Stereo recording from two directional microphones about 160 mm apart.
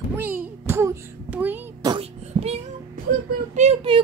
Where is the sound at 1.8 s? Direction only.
25° right (ahead or behind).